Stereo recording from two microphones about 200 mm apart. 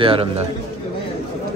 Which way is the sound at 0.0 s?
25° right (ahead or behind).